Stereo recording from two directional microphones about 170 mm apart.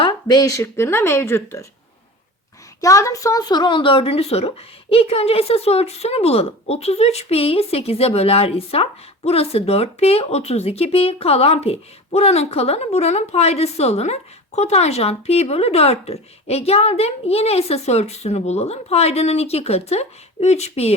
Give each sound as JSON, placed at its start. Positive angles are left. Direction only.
{"t": 0.0, "sound": "speech", "side_deg": 25}
{"t": 2.8, "sound": "speech", "side_deg": 20}